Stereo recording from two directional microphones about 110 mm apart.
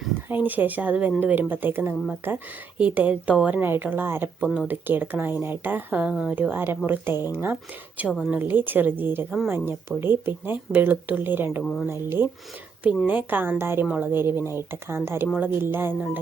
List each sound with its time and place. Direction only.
0.3 s speech: 15° right (ahead or behind)
8.1 s a woman's voice: 5° right (ahead or behind)
8.4 s speech: 20° right (ahead or behind)
12.8 s speech: 10° right (ahead or behind)